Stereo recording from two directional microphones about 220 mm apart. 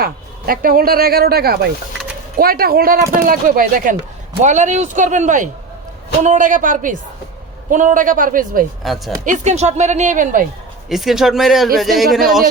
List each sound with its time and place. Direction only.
0.0 s speech: 40° right (ahead or behind)
8.8 s speech: centre (ahead or behind)
9.2 s speech: 35° right (ahead or behind)
10.8 s speech: centre (ahead or behind)